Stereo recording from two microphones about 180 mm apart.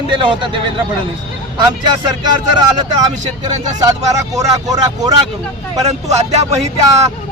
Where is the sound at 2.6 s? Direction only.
20° right (ahead or behind).